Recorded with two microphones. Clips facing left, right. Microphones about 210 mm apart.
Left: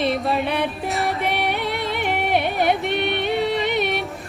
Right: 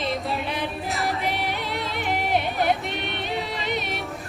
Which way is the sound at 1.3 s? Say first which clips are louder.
Left 4 dB; 65° left (ahead or behind).